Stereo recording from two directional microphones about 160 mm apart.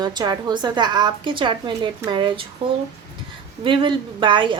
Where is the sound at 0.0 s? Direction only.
25° right (ahead or behind).